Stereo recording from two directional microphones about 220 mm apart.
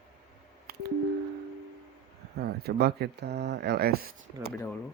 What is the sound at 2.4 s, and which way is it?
Speech, 45° right (ahead or behind).